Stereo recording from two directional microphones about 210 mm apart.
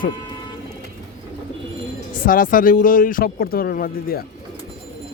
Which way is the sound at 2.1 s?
40° left (ahead or behind).